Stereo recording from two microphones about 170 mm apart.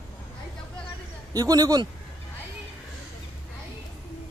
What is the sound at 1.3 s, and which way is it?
Speech, 20° right (ahead or behind).